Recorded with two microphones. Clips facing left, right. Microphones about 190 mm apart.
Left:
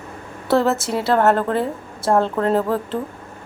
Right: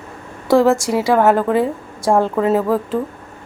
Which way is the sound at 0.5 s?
10° right (ahead or behind).